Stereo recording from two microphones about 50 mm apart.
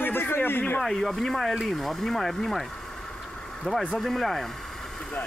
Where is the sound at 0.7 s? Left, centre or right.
Centre.